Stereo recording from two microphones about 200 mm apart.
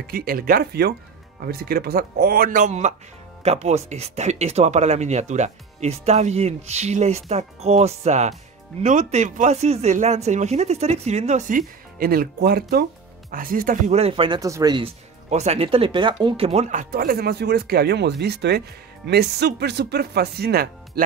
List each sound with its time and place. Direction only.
0.1 s speech: 45° right (ahead or behind); by 14.9 s 20° right (ahead or behind)
15.2 s speech: 35° right (ahead or behind); by 21.0 s 50° right (ahead or behind)